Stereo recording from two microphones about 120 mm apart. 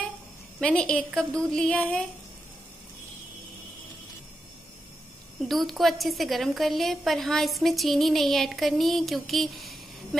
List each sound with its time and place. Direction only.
0.6 s a woman's voice: 10° left (ahead or behind)
5.4 s a woman's voice: centre (ahead or behind)